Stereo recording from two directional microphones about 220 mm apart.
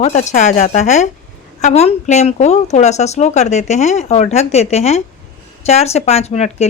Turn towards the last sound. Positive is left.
turn(degrees=30)  # may be behind; listen again after turning